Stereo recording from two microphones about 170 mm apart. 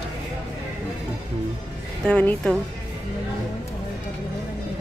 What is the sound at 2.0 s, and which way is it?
Speech, 5° left (ahead or behind).